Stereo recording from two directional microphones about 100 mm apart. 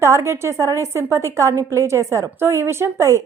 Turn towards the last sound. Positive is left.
turn(degrees=-30)  # may be behind; listen again after turning